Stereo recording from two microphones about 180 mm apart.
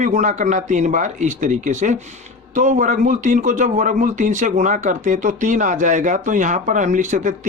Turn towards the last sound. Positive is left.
turn(degrees=-45)  # may be behind; listen again after turning